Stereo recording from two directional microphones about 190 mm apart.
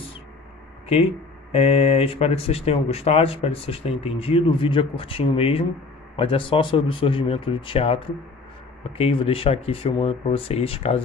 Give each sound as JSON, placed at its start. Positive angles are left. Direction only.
{"t": 1.5, "sound": "speech", "side_deg": 30}